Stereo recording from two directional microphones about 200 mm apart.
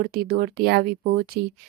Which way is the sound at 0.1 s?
50° right (ahead or behind).